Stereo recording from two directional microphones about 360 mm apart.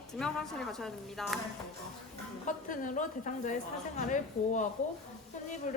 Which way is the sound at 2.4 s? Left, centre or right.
Left.